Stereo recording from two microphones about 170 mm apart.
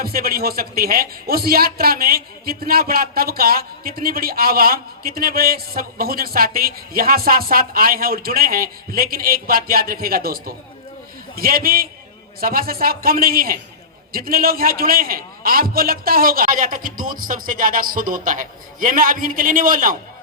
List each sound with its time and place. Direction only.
0.0 s a man's voice: 60° right (ahead or behind)